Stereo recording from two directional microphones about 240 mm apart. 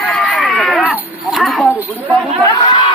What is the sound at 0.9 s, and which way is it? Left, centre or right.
Chatter, centre.